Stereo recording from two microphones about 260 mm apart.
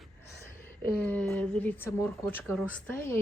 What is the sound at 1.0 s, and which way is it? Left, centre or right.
Speech, centre.